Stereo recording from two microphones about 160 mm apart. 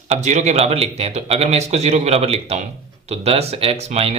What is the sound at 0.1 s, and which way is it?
Speech, 45° right (ahead or behind).